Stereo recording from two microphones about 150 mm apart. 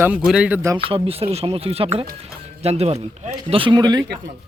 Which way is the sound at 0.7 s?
35° right (ahead or behind).